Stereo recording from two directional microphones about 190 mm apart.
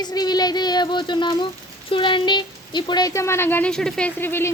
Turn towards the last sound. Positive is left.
turn(degrees=10)  # may be behind; listen again after turning